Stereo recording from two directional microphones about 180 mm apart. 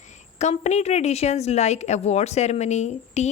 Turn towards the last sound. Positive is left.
turn(degrees=40)  # may be behind; listen again after turning